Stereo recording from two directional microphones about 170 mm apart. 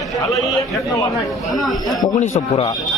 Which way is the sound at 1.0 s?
20° left (ahead or behind).